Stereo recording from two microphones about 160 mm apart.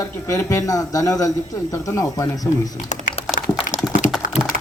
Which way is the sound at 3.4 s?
65° left (ahead or behind).